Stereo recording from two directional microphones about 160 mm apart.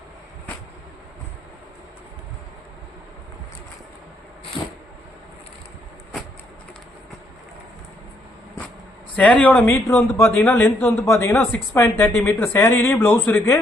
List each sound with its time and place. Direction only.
4.6 s vehicle: 30° left (ahead or behind)
9.1 s speech: 10° left (ahead or behind)
11.0 s speech: 20° left (ahead or behind)